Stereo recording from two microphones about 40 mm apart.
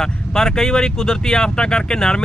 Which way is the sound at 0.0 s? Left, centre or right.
Centre.